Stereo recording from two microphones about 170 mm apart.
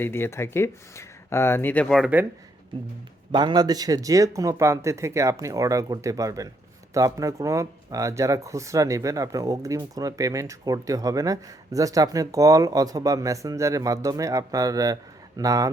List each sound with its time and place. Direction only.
0.0 s speech: 15° left (ahead or behind)
3.3 s speech: 25° right (ahead or behind)